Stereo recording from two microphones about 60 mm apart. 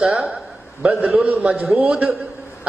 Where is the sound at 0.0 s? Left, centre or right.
Centre.